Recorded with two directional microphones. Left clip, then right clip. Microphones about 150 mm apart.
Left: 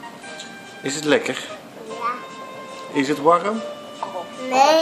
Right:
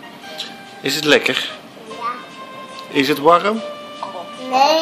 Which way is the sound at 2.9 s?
15° right (ahead or behind).